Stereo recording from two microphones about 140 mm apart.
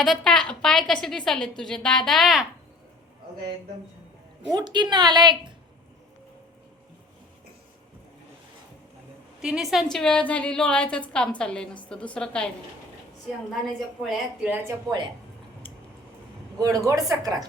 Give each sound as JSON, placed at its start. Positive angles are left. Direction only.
{"t": 0.0, "sound": "speech", "side_deg": 0}
{"t": 4.4, "sound": "a woman's voice", "side_deg": -30}
{"t": 9.4, "sound": "a woman's voice", "side_deg": -5}
{"t": 14.0, "sound": "speech", "side_deg": 0}
{"t": 16.6, "sound": "a woman's voice", "side_deg": -25}